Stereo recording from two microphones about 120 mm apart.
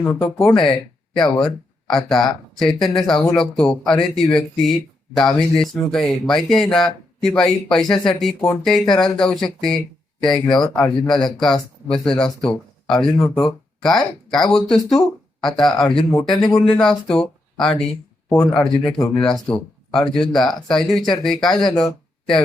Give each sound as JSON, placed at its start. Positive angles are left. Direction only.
{"t": 0.0, "sound": "speech", "side_deg": 15}
{"t": 0.5, "sound": "speech", "side_deg": 40}
{"t": 1.1, "sound": "speech", "side_deg": 5}
{"t": 21.8, "sound": "a sound", "side_deg": 5}